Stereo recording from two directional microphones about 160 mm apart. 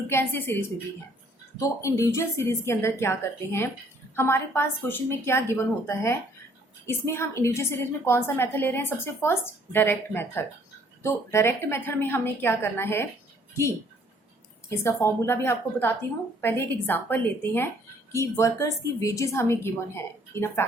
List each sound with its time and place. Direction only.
0.1 s a woman's voice: 15° left (ahead or behind)
14.7 s a woman's voice: 15° left (ahead or behind)